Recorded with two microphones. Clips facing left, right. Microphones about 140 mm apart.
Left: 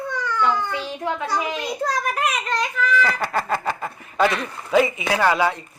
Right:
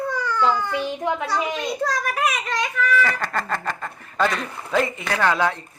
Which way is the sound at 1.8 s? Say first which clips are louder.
Left 1 dB; centre (ahead or behind).